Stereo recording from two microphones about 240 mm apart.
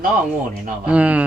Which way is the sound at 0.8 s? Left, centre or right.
Centre.